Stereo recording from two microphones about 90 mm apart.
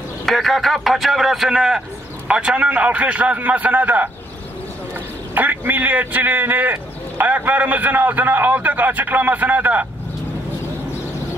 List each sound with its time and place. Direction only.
0.2 s a man's voice: centre (ahead or behind); by 4.1 s 20° right (ahead or behind)
5.3 s a man's voice: 20° right (ahead or behind)